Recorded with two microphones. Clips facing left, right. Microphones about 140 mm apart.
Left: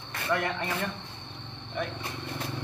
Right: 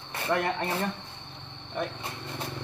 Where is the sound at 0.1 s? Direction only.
25° right (ahead or behind).